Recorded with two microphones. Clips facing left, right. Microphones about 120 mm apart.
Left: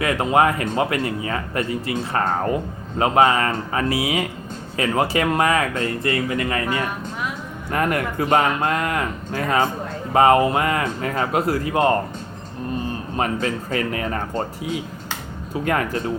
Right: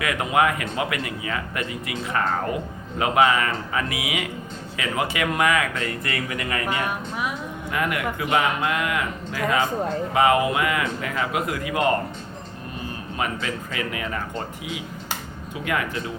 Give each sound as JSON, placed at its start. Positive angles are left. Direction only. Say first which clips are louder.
{"t": 0.0, "sound": "speech", "louder": "left 4 dB", "side_deg": 35}
{"t": 7.7, "sound": "speech", "louder": "left 4 dB", "side_deg": 40}